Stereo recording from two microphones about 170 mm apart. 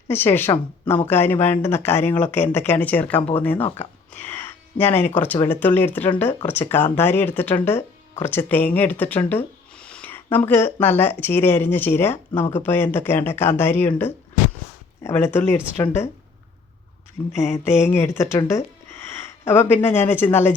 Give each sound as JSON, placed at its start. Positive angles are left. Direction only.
{"t": 0.1, "sound": "speech", "side_deg": 10}
{"t": 17.5, "sound": "speech", "side_deg": 15}